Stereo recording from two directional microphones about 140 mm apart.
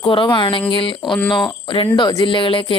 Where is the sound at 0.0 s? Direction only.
35° left (ahead or behind).